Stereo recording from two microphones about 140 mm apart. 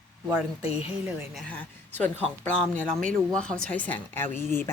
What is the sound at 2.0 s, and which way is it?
Speech, 10° left (ahead or behind).